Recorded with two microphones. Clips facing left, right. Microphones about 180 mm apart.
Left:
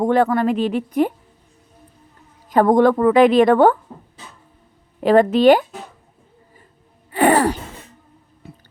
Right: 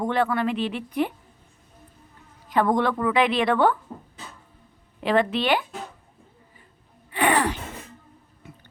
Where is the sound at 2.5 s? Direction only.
45° left (ahead or behind).